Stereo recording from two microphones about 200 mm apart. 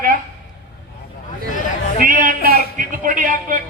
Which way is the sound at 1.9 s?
45° right (ahead or behind).